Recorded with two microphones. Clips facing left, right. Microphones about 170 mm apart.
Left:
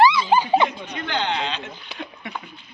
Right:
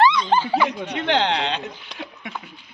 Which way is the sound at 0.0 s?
5° left (ahead or behind).